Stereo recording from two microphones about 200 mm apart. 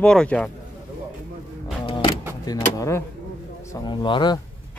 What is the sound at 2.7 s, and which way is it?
Speech, 15° left (ahead or behind).